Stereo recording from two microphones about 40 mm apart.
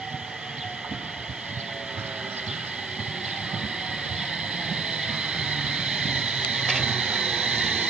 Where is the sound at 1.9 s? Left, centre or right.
Right.